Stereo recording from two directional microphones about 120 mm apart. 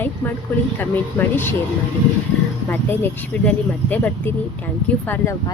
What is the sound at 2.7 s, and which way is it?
Speech, 15° left (ahead or behind).